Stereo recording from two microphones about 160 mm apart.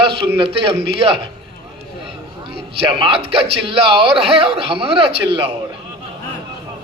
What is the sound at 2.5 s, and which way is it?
A man's voice, 30° right (ahead or behind).